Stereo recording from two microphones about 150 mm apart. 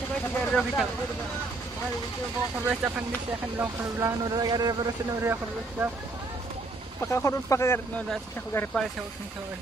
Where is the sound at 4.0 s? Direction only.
25° right (ahead or behind).